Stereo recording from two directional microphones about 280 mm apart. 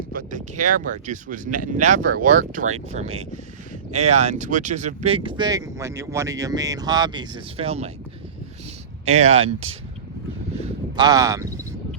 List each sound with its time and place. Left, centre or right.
0.1 s speech: right
9.0 s speech: right
10.5 s a sound: centre